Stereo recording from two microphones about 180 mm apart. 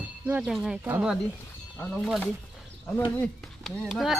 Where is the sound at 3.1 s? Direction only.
5° left (ahead or behind).